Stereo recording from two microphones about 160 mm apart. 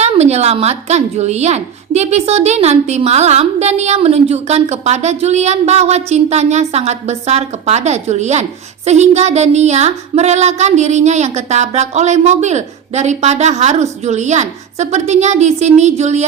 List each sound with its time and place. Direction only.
0.0 s speech: 45° right (ahead or behind)